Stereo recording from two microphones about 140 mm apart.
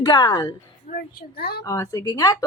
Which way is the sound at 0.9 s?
90° left.